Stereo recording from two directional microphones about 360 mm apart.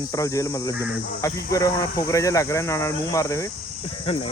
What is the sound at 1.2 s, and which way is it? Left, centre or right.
Speech, centre.